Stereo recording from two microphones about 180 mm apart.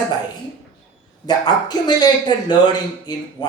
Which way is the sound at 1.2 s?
25° left (ahead or behind).